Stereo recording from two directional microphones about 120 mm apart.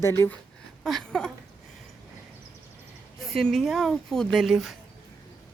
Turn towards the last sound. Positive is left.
turn(degrees=0)  # may be behind; listen again after turning